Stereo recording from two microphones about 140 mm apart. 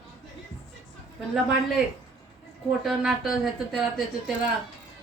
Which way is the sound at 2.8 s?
Centre (ahead or behind).